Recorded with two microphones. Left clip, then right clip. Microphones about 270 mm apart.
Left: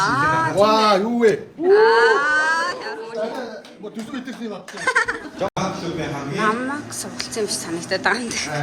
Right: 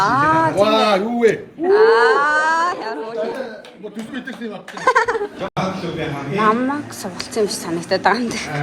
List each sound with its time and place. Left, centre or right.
0.0 s a sound: centre
4.9 s speech: centre
6.3 s a woman's voice: centre